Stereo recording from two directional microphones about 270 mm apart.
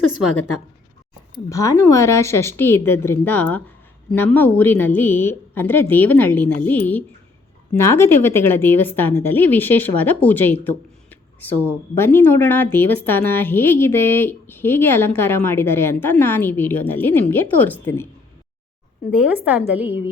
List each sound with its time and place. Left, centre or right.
1.5 s a woman's voice: centre
19.5 s a woman's voice: centre